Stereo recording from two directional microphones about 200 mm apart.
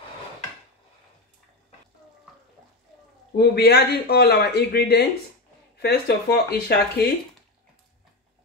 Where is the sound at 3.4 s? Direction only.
55° left (ahead or behind).